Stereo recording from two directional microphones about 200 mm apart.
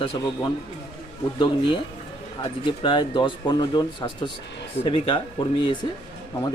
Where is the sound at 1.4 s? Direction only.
25° left (ahead or behind).